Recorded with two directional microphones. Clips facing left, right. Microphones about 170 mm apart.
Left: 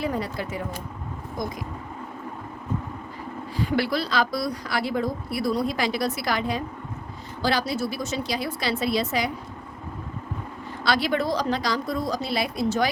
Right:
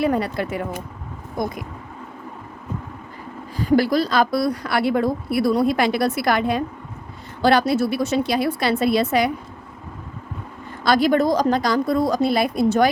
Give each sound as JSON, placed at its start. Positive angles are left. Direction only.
{"t": 0.0, "sound": "a woman's voice", "side_deg": -65}
{"t": 3.6, "sound": "a woman's voice", "side_deg": -45}
{"t": 10.8, "sound": "a woman's voice", "side_deg": -45}